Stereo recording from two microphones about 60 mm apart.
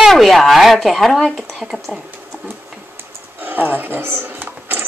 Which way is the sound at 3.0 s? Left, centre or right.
Right.